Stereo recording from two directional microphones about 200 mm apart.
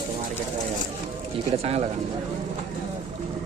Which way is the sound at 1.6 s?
30° right (ahead or behind).